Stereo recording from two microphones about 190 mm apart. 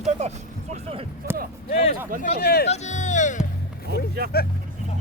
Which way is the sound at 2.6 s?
35° left (ahead or behind).